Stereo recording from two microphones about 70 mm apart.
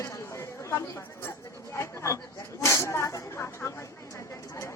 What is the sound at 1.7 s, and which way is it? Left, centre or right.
Chatter, left.